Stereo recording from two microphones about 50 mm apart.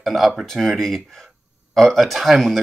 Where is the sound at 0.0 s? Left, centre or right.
Centre.